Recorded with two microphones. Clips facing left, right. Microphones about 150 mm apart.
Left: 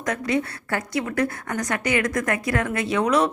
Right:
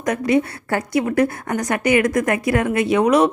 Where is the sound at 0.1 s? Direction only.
25° right (ahead or behind).